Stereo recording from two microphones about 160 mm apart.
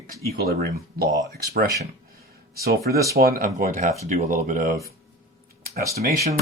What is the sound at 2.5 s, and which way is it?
Speech, 75° right (ahead or behind).